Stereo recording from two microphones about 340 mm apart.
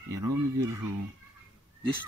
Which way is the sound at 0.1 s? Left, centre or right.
Right.